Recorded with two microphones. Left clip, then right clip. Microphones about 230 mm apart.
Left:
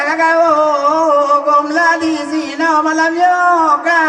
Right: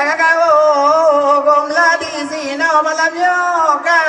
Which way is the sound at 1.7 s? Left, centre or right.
Right.